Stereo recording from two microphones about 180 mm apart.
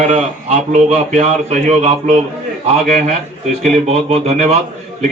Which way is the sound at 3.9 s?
35° right (ahead or behind).